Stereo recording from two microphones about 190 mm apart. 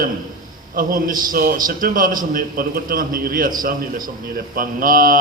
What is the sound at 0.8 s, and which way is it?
A man's voice, 50° right (ahead or behind).